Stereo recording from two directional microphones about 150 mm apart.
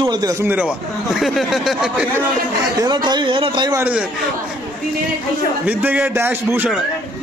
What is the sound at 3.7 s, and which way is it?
Speech, 10° right (ahead or behind).